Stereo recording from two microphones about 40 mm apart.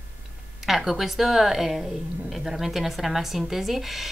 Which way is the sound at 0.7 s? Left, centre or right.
Centre.